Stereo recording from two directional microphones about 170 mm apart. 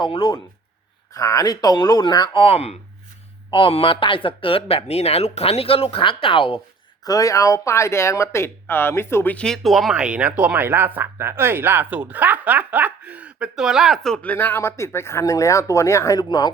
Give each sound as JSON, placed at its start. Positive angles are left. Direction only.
{"t": 0.0, "sound": "speech", "side_deg": 30}
{"t": 7.0, "sound": "speech", "side_deg": 20}